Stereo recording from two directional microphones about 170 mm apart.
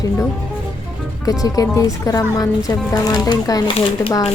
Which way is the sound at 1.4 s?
20° left (ahead or behind).